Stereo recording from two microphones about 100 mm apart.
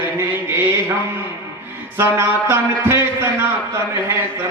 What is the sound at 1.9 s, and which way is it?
Music, 20° right (ahead or behind).